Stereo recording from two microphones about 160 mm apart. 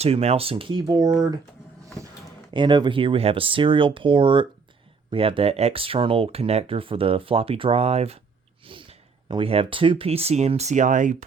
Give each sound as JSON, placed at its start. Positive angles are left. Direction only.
{"t": 0.0, "sound": "speech", "side_deg": -40}
{"t": 2.5, "sound": "speech", "side_deg": -30}